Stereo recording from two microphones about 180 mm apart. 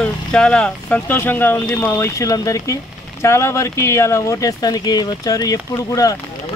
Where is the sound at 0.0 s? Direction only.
5° left (ahead or behind).